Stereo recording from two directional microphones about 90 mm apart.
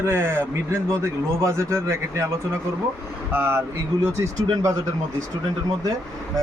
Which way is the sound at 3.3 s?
25° right (ahead or behind).